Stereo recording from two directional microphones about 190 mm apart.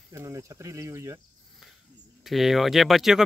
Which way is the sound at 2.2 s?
Centre (ahead or behind).